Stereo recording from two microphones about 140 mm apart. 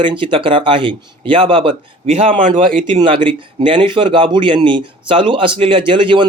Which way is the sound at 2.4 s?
70° right (ahead or behind).